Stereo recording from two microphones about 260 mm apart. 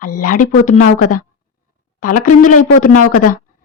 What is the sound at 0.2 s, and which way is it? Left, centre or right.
Speech, left.